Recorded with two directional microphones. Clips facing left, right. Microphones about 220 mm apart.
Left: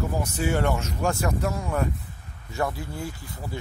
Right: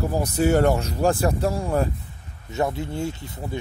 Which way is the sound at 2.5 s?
20° right (ahead or behind).